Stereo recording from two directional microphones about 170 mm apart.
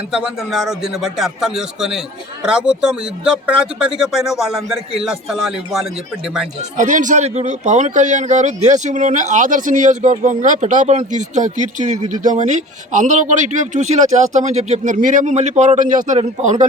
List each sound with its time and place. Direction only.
0.1 s speech: 5° right (ahead or behind)
6.7 s a man's voice: 50° right (ahead or behind)